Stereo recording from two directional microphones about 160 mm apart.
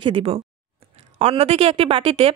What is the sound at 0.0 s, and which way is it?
A woman's voice, 35° right (ahead or behind).